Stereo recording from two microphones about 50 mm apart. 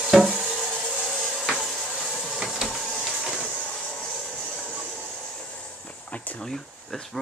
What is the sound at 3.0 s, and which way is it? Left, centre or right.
Train, centre.